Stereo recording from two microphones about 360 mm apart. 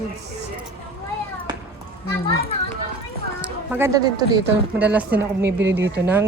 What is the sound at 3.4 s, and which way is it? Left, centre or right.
Speech, centre.